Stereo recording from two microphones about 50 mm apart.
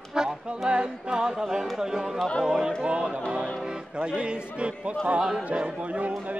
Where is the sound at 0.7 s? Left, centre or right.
Centre.